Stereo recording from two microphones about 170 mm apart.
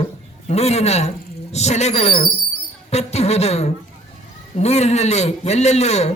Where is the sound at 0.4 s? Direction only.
40° left (ahead or behind).